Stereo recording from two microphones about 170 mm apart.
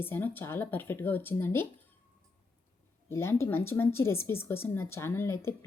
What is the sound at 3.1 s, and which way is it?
A woman's voice, 15° left (ahead or behind).